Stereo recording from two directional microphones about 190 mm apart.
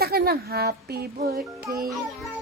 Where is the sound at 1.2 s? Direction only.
55° right (ahead or behind).